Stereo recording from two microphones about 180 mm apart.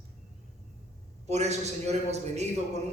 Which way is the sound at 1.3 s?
40° right (ahead or behind).